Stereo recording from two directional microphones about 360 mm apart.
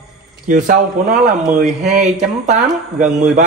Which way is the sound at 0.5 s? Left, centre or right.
Right.